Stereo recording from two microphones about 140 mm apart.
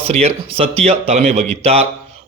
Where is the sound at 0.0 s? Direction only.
50° right (ahead or behind).